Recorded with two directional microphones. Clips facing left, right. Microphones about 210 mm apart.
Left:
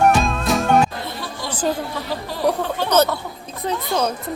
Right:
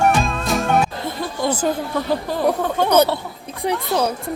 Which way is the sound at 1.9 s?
50° right (ahead or behind).